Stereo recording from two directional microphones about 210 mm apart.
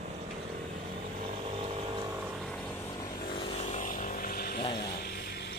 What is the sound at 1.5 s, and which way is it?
Vehicle, 25° right (ahead or behind).